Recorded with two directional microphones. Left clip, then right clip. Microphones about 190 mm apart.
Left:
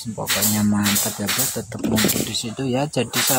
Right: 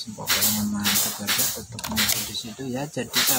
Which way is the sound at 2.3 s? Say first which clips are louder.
Left 7 dB; 40° left (ahead or behind).